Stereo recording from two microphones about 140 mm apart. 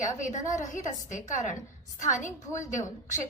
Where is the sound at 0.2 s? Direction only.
60° left (ahead or behind).